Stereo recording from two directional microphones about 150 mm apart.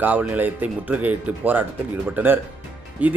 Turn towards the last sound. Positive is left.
turn(degrees=-10)  # may be behind; listen again after turning